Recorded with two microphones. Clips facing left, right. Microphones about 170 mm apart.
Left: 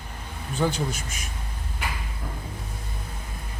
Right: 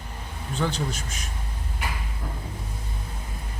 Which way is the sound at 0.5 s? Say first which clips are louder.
Left 2 dB; 10° left (ahead or behind).